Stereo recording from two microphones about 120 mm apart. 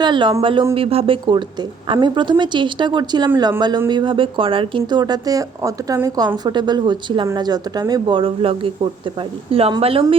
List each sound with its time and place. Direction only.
0.0 s a woman's voice: 40° right (ahead or behind)
0.7 s a woman's voice: 55° right (ahead or behind)